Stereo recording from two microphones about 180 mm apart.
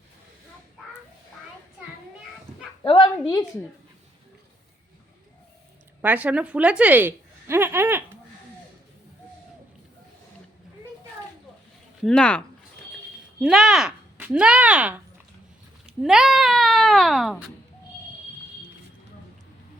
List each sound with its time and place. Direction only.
2.8 s a sound: 25° left (ahead or behind)
6.0 s a woman's voice: 10° right (ahead or behind)
12.0 s speech: 5° left (ahead or behind)